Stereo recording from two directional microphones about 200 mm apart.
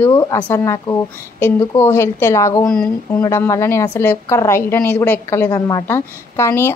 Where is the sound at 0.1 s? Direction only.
15° left (ahead or behind).